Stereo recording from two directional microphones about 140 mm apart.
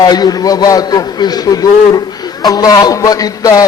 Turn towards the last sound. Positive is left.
turn(degrees=25)  # may be behind; listen again after turning